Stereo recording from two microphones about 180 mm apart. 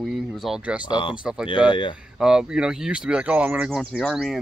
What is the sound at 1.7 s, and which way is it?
Speech, 25° left (ahead or behind).